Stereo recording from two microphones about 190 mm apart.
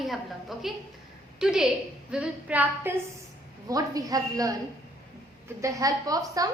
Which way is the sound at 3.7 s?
20° right (ahead or behind).